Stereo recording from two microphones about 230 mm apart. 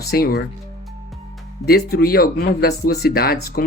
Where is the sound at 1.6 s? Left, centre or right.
Left.